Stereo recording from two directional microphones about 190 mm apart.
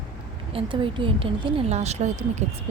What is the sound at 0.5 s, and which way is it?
A woman's voice, 25° right (ahead or behind).